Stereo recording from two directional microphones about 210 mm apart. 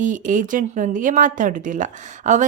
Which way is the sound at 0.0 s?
35° right (ahead or behind).